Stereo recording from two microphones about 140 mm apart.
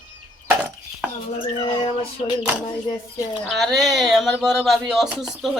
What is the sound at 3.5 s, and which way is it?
Speech, centre (ahead or behind).